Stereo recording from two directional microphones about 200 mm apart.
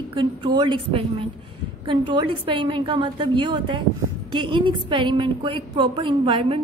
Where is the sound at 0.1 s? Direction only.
25° right (ahead or behind).